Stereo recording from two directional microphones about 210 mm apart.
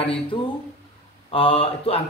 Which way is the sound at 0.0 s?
25° left (ahead or behind).